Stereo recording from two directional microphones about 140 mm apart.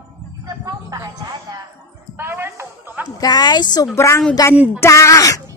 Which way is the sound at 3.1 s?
30° left (ahead or behind).